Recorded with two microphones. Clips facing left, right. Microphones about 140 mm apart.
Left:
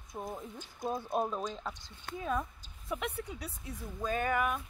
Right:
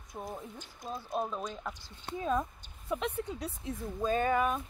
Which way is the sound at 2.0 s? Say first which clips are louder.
Right 3 dB; 25° right (ahead or behind).